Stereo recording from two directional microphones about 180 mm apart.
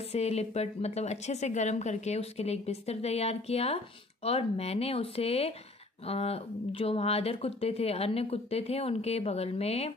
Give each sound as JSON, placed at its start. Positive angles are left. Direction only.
{"t": 0.1, "sound": "a woman's voice", "side_deg": 35}